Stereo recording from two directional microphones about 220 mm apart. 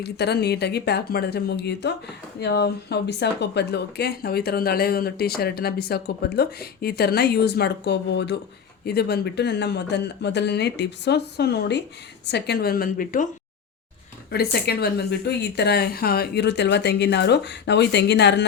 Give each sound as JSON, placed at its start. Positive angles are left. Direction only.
{"t": 0.0, "sound": "speech", "side_deg": 50}
{"t": 14.3, "sound": "speech", "side_deg": 45}